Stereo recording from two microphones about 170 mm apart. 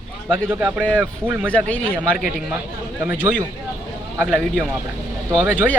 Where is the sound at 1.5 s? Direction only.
10° left (ahead or behind).